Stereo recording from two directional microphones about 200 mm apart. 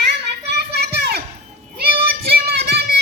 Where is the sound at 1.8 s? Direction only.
50° right (ahead or behind).